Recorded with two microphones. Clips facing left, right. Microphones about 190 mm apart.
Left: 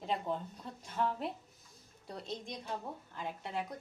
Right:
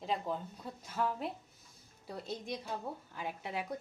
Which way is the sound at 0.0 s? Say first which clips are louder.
Even; centre (ahead or behind).